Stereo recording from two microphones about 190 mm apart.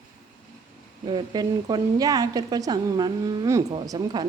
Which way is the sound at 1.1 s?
20° right (ahead or behind).